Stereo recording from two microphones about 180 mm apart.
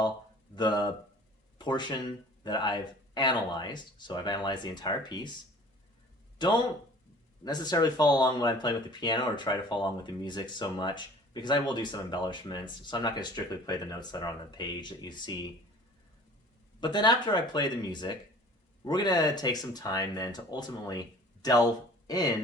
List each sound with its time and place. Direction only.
0.5 s speech: 25° left (ahead or behind)
7.4 s speech: 20° left (ahead or behind)
16.8 s speech: 25° left (ahead or behind)